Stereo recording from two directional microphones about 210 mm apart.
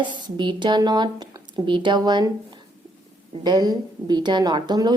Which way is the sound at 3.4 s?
20° right (ahead or behind).